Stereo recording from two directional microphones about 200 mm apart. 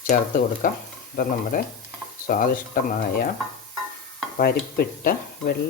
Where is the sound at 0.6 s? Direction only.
45° left (ahead or behind).